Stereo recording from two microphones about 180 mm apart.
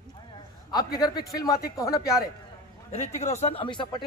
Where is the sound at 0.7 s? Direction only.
20° left (ahead or behind).